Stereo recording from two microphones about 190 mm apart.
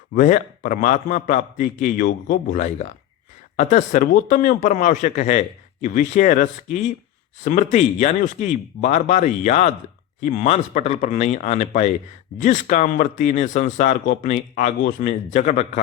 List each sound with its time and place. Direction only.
0.1 s a man's voice: 45° left (ahead or behind)